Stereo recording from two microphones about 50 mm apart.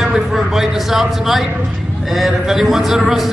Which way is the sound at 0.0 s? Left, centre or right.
Centre.